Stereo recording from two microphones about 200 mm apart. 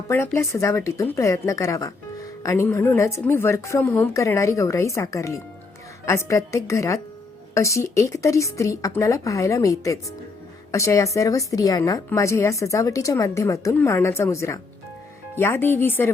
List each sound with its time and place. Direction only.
0.1 s a woman's voice: 15° left (ahead or behind)